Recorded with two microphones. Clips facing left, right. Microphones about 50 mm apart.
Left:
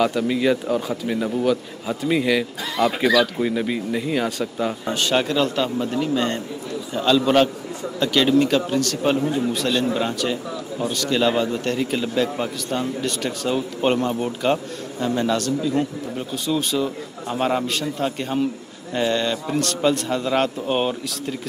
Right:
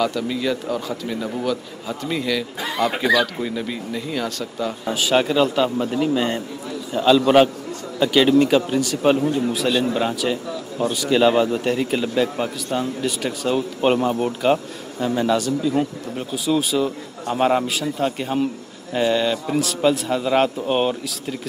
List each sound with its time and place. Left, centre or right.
0.0 s a man's voice: centre
4.8 s a man's voice: centre